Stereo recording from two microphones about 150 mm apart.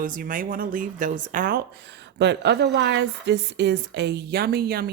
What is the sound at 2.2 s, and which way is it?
Speech, 90° right.